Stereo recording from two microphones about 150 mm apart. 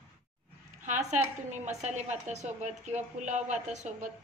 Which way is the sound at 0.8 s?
55° right (ahead or behind).